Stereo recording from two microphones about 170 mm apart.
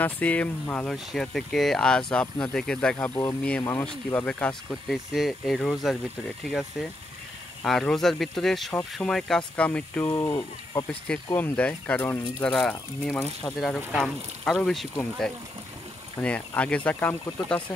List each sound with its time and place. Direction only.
0.0 s speech: 10° left (ahead or behind)
7.6 s speech: 5° left (ahead or behind); by 10.9 s 20° left (ahead or behind)
11.3 s speech: 10° left (ahead or behind)